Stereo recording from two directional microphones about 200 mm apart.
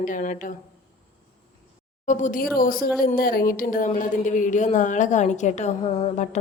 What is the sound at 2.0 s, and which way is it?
A woman's voice, 40° left (ahead or behind).